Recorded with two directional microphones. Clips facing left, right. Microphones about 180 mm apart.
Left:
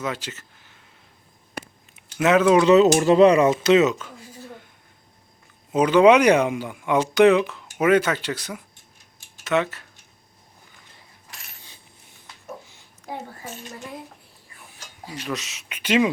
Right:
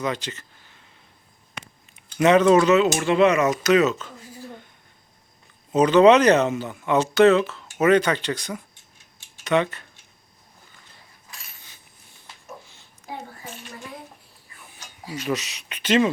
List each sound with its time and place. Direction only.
0.0 s speech: 5° left (ahead or behind)
2.1 s speech: 5° left (ahead or behind)
2.6 s speech: 35° left (ahead or behind)
5.7 s speech: 10° left (ahead or behind)
15.0 s speech: centre (ahead or behind)